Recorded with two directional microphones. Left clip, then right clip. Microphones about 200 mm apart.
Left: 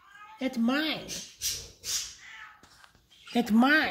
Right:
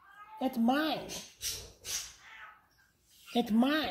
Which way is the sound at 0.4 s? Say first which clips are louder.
Left 1 dB; 50° left (ahead or behind).